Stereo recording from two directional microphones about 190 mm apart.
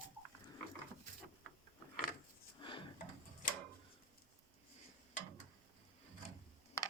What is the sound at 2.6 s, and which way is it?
Drawer open or close, 25° left (ahead or behind).